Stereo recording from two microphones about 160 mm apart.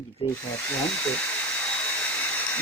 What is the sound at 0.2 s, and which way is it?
Speech, 35° left (ahead or behind).